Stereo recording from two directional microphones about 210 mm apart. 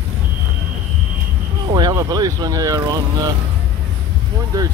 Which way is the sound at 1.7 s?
15° right (ahead or behind).